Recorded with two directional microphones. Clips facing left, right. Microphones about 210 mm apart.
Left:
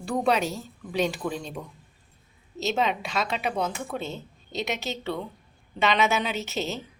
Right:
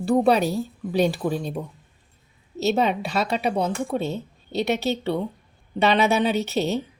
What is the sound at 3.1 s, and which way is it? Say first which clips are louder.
A woman's voice: right 5 dB; 35° right (ahead or behind).